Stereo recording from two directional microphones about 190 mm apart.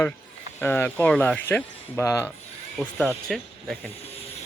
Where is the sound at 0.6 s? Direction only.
10° left (ahead or behind).